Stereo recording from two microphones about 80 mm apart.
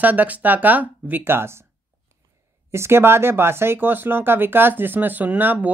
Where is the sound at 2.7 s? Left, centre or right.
Right.